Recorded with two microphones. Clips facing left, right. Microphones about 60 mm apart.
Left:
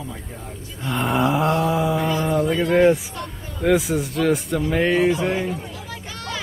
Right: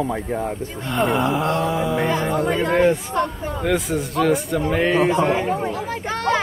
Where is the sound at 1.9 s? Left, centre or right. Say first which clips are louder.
Even; right.